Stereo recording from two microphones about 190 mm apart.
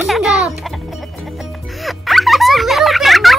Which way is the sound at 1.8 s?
Centre (ahead or behind).